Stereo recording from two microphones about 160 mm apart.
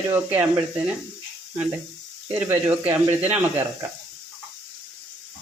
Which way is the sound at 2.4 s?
10° right (ahead or behind).